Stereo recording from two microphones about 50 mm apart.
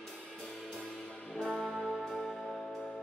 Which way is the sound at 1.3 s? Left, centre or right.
Centre.